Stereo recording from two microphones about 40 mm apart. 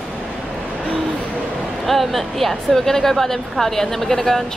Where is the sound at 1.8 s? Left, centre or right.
Centre.